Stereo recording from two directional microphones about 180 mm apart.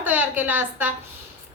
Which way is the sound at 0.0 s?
10° right (ahead or behind).